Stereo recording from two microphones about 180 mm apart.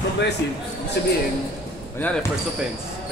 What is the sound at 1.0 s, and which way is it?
Speech, 70° left (ahead or behind).